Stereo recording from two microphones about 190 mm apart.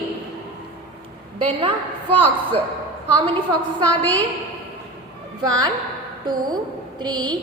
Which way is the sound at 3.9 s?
10° left (ahead or behind).